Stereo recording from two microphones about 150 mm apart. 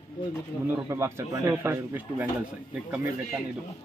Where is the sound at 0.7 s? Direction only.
20° right (ahead or behind).